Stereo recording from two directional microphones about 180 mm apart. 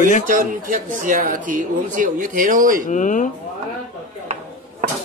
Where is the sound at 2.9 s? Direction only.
45° left (ahead or behind).